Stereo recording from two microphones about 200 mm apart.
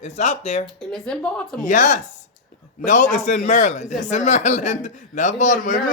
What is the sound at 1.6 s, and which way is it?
Speech, 35° left (ahead or behind).